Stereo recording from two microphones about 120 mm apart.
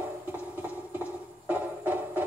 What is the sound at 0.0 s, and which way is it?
Music, 15° right (ahead or behind).